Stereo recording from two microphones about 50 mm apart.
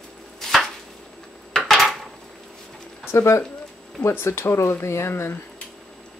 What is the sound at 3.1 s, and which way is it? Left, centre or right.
Speech, left.